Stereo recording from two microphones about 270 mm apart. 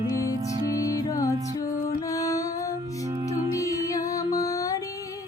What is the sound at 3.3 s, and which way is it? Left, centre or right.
Music, centre.